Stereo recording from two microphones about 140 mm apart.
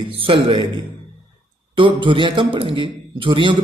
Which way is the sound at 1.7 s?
35° right (ahead or behind).